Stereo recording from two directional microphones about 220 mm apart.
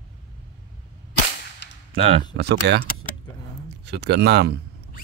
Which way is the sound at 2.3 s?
50° right (ahead or behind).